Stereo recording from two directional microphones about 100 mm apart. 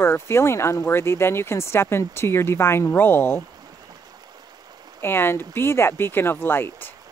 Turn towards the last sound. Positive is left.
turn(degrees=20)  # may be behind; listen again after turning